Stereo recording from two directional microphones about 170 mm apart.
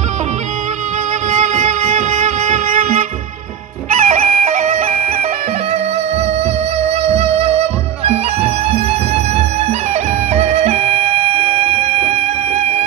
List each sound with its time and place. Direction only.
1.3 s music: 45° right (ahead or behind)
3.9 s bagpipes: 45° right (ahead or behind)
6.8 s music: 35° right (ahead or behind)